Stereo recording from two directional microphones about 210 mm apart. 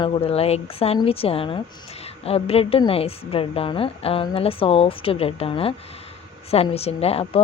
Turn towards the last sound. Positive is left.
turn(degrees=30)  # may be behind; listen again after turning